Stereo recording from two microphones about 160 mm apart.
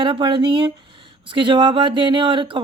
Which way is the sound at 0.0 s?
30° right (ahead or behind).